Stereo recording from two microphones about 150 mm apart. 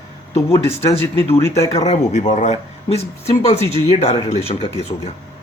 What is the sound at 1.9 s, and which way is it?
Speech, 55° left (ahead or behind).